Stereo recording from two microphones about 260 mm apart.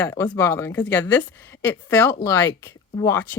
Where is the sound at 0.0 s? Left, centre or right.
Centre.